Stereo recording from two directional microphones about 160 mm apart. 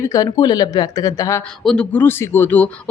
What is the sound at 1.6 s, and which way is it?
Speech, 5° left (ahead or behind).